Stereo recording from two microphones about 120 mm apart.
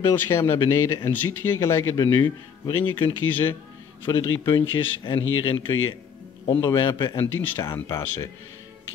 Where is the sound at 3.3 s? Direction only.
15° left (ahead or behind).